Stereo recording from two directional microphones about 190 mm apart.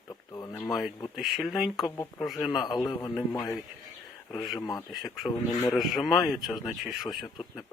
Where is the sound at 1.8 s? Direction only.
20° left (ahead or behind).